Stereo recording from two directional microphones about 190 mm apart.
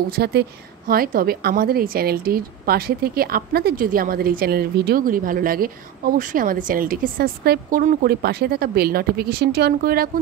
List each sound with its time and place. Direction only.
0.1 s a woman's voice: 60° right (ahead or behind)